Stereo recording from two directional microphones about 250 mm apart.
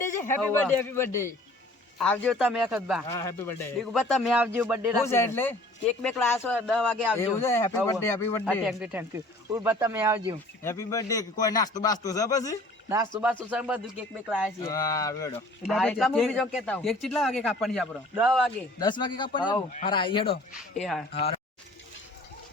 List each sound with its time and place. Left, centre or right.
0.0 s a man's voice: centre
3.1 s a man's voice: centre
5.0 s a man's voice: centre
7.3 s a man's voice: centre
8.6 s speech: centre
10.6 s a man's voice: centre
13.5 s a man's voice: centre
14.6 s a man's voice: centre
15.6 s a man's voice: centre
18.8 s a man's voice: centre
20.5 s a man's voice: centre
21.1 s a man's voice: left